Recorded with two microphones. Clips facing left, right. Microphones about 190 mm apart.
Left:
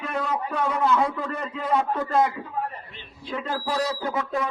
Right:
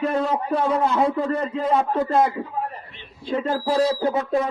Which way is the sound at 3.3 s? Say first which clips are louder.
Right 6 dB; 30° right (ahead or behind).